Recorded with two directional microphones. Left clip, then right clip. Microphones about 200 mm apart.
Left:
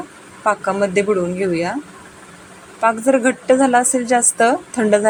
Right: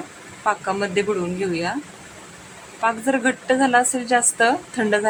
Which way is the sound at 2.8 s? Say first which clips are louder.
Left 5 dB; 10° left (ahead or behind).